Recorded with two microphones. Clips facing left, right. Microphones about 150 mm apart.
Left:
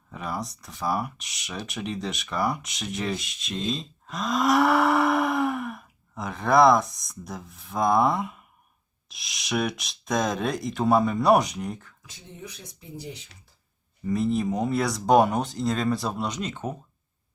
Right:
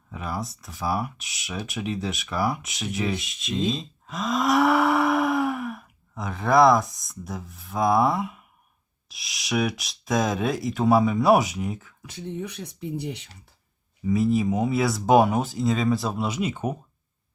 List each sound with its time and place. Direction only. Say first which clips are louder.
0.1 s speech: right 1 dB; centre (ahead or behind)
12.0 s speech: right 11 dB; 65° right (ahead or behind)
14.0 s speech: right 3 dB; centre (ahead or behind)